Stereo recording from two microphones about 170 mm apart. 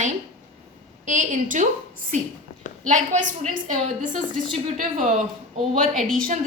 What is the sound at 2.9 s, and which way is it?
A woman's voice, 45° right (ahead or behind).